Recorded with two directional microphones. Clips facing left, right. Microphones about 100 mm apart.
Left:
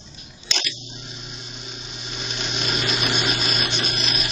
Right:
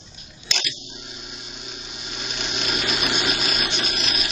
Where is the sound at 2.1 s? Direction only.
Centre (ahead or behind).